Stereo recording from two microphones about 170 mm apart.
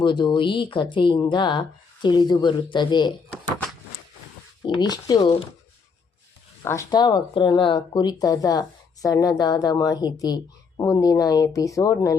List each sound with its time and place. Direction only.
0.0 s speech: 30° left (ahead or behind)
4.6 s speech: 25° left (ahead or behind)
6.6 s speech: 20° left (ahead or behind)